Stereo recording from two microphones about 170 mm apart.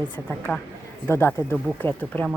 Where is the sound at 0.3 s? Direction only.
10° left (ahead or behind).